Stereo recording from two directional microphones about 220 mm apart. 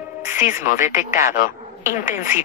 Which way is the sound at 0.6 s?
35° left (ahead or behind).